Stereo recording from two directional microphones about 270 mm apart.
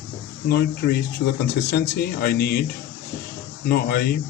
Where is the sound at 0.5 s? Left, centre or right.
Left.